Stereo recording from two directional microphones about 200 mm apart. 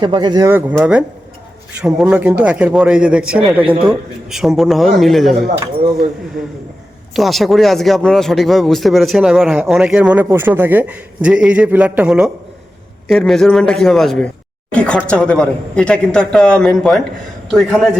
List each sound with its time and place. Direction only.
0.0 s speech: 20° right (ahead or behind); by 3.4 s 5° right (ahead or behind)
3.6 s a man's voice: 25° right (ahead or behind)
3.8 s speech: centre (ahead or behind)
7.1 s speech: centre (ahead or behind)